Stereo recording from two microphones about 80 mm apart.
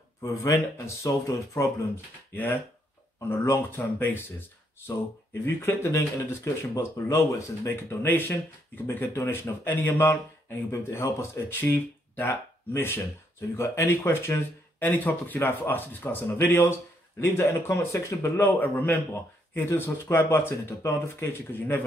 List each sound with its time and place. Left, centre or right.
0.5 s speech: left
2.3 s speech: left
5.4 s speech: left
14.8 s speech: left